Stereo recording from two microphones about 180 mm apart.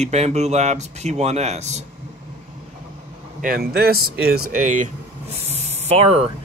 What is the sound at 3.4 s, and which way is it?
Speech, 55° right (ahead or behind).